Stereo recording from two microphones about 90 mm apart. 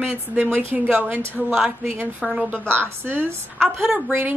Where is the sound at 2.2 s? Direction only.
5° right (ahead or behind).